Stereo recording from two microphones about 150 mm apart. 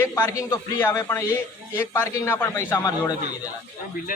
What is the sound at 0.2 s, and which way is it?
Speech, 20° left (ahead or behind).